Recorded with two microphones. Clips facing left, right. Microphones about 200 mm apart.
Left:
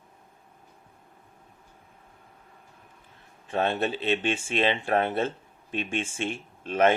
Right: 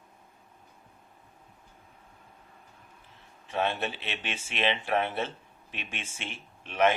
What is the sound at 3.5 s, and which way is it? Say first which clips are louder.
Speech: left 4 dB; 50° left (ahead or behind).